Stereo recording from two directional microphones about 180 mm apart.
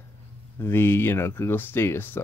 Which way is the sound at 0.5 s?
15° left (ahead or behind).